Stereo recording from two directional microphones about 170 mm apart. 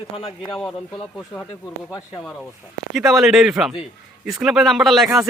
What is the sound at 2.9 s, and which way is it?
A man's voice, centre (ahead or behind).